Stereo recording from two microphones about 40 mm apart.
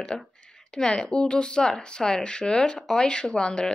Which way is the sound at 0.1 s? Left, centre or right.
Centre.